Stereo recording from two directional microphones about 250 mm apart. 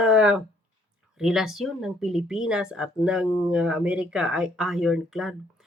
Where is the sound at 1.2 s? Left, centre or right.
Centre.